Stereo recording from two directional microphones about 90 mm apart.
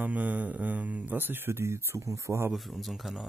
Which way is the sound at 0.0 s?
15° right (ahead or behind).